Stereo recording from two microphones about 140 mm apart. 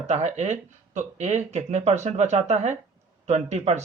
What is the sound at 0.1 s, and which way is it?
Speech, 55° right (ahead or behind).